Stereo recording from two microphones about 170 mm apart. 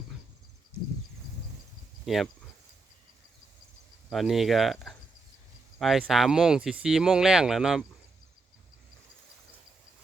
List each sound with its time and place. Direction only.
2.0 s speech: centre (ahead or behind)
4.1 s speech: centre (ahead or behind)